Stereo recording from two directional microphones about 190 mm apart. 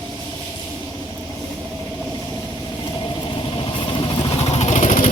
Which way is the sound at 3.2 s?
25° left (ahead or behind).